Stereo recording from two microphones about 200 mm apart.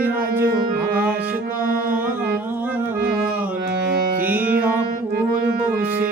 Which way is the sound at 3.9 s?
45° right (ahead or behind).